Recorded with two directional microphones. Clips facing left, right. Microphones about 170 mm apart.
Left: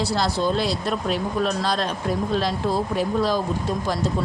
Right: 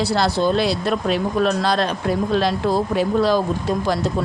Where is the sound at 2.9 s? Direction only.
70° right (ahead or behind).